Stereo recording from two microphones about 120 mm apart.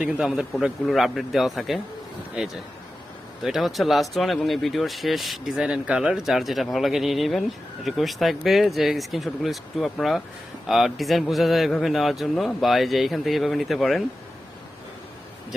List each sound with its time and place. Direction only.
0.0 s speech: 5° right (ahead or behind)